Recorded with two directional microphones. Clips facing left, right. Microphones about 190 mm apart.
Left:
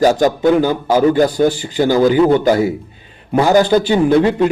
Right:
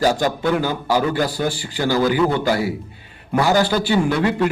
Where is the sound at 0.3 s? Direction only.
20° left (ahead or behind).